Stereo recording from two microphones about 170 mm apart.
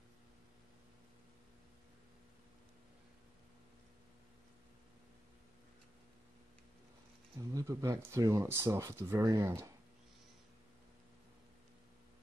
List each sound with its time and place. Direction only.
7.3 s speech: 20° right (ahead or behind)